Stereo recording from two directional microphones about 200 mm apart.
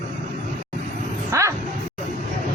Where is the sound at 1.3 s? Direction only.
15° right (ahead or behind).